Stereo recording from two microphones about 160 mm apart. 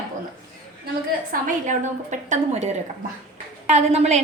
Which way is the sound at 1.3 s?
50° right (ahead or behind).